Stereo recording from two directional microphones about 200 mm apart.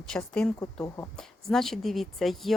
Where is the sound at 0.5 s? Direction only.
15° left (ahead or behind).